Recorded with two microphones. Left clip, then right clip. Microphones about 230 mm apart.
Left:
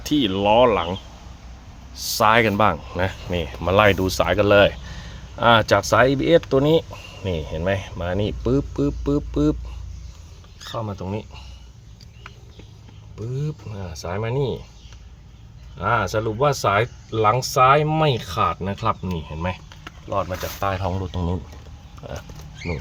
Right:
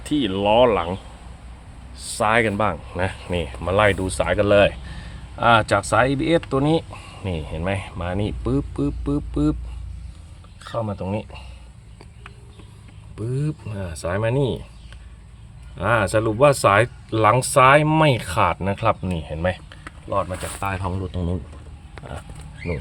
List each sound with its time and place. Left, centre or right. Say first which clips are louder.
0.0 s speech: left 1 dB; centre
2.0 s speech: left 3 dB; centre
3.0 s speech: right 2 dB; centre
3.6 s speech: left 2 dB; centre
10.7 s speech: right 3 dB; centre
13.4 s speech: right 3 dB; right
15.8 s speech: right 2 dB; right
19.2 s speech: right 4 dB; centre
20.1 s speech: right 1 dB; centre